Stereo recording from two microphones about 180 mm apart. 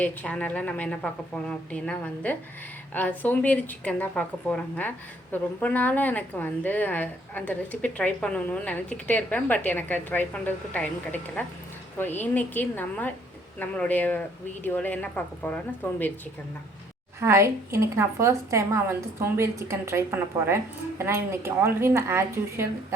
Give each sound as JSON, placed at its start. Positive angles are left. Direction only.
{"t": 0.0, "sound": "a woman's voice", "side_deg": 5}
{"t": 17.2, "sound": "a woman's voice", "side_deg": -15}